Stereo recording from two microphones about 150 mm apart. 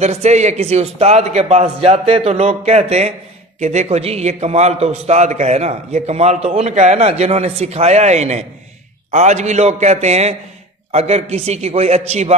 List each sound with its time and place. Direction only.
0.0 s a man's voice: 50° right (ahead or behind)